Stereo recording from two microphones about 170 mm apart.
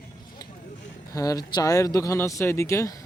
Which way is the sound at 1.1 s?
20° left (ahead or behind).